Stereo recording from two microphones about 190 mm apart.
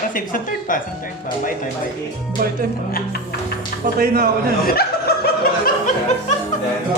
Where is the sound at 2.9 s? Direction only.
50° left (ahead or behind).